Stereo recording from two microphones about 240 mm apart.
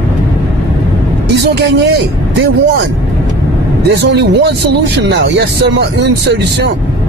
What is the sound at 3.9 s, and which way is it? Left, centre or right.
Speech, right.